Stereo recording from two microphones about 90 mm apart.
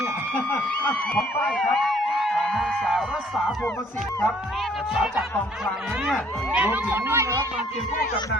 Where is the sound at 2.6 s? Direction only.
5° right (ahead or behind).